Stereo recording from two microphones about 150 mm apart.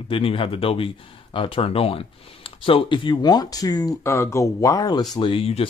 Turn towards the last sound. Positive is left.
turn(degrees=40)  # may be behind; listen again after turning